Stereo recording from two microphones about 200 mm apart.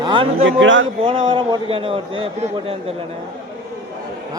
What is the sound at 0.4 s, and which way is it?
Speech, 70° right (ahead or behind).